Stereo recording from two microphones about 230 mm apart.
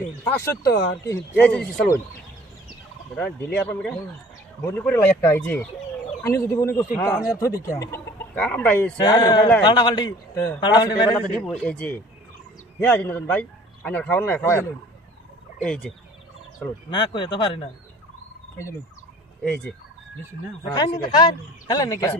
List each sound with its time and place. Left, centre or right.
0.0 s speech: centre
3.2 s speech: centre
9.0 s speech: centre
11.1 s speech: centre
16.9 s speech: centre
20.7 s speech: centre